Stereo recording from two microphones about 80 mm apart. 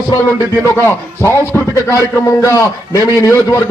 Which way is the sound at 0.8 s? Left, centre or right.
Left.